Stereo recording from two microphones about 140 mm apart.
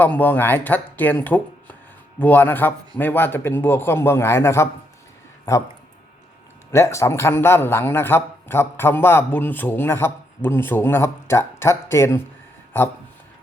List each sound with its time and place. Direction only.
0.0 s speech: 10° left (ahead or behind)
6.7 s speech: 20° left (ahead or behind)